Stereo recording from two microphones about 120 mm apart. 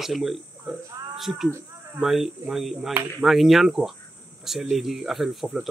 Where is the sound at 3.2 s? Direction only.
Centre (ahead or behind).